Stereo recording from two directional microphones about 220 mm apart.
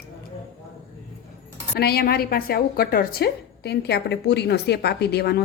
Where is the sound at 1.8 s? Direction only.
45° left (ahead or behind).